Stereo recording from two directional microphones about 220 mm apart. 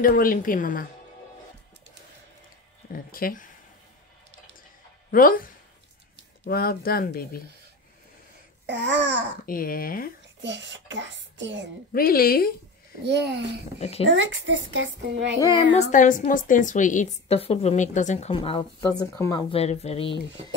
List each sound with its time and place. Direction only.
0.0 s a woman's voice: 40° left (ahead or behind)
3.1 s a woman's voice: 40° left (ahead or behind)
5.1 s a woman's voice: 40° left (ahead or behind)
8.6 s speech: 50° right (ahead or behind)
9.5 s a woman's voice: 40° left (ahead or behind)
10.4 s a child's voice: 55° right (ahead or behind)
11.9 s speech: 40° left (ahead or behind)
13.0 s speech: 50° right (ahead or behind)
13.7 s a woman's voice: 25° left (ahead or behind)
14.3 s speech: 55° right (ahead or behind)
15.5 s a woman's voice: 20° left (ahead or behind)
15.8 s a woman's voice: 35° left (ahead or behind); by 19.4 s 15° left (ahead or behind)
19.5 s a woman's voice: 30° left (ahead or behind)